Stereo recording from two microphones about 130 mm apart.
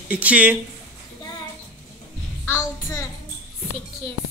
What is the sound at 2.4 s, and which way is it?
Child singing, 20° left (ahead or behind).